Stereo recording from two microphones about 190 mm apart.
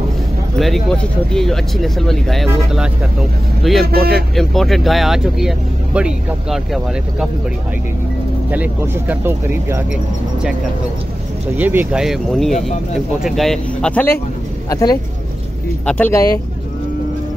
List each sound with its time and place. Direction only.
0.6 s speech: centre (ahead or behind)
3.8 s speech: 50° right (ahead or behind)
4.1 s speech: centre (ahead or behind)
8.5 s speech: 10° right (ahead or behind)
11.5 s speech: 10° right (ahead or behind); by 14.1 s 5° left (ahead or behind)
14.7 s speech: 20° left (ahead or behind)